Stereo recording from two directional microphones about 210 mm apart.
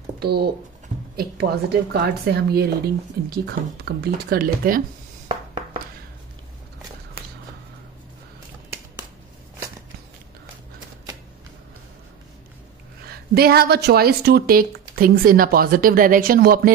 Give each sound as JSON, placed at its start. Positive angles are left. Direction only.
{"t": 0.2, "sound": "a woman's voice", "side_deg": -50}
{"t": 13.0, "sound": "a woman's voice", "side_deg": -45}